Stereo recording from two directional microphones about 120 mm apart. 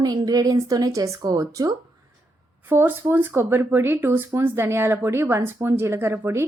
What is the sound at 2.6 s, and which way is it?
A woman's voice, 15° right (ahead or behind).